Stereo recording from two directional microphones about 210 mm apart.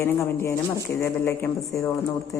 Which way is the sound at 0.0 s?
15° left (ahead or behind).